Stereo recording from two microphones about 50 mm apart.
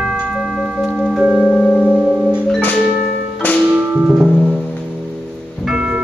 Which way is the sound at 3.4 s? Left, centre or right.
Left.